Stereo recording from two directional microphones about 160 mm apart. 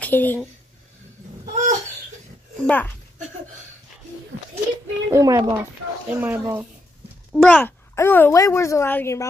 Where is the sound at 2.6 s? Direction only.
10° left (ahead or behind).